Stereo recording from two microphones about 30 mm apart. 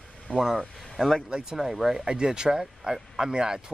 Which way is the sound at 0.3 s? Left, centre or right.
Left.